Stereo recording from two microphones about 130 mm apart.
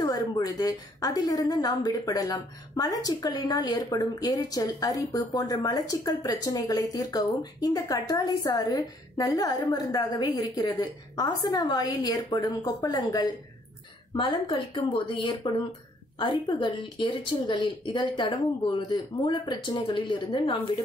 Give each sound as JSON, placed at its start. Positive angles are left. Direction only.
{"t": 0.0, "sound": "a woman's voice", "side_deg": 30}